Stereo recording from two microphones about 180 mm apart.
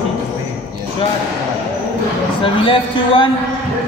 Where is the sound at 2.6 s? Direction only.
30° left (ahead or behind).